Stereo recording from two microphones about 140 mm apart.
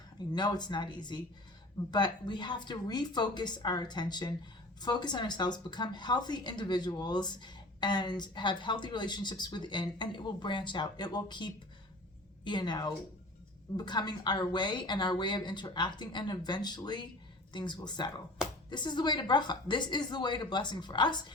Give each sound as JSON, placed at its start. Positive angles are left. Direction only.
{"t": 0.3, "sound": "a woman's voice", "side_deg": 30}